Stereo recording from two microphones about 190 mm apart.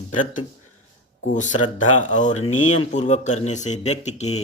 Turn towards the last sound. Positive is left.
turn(degrees=35)  # may be behind; listen again after turning